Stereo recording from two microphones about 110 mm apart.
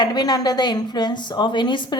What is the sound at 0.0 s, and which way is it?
A woman's voice, 40° left (ahead or behind).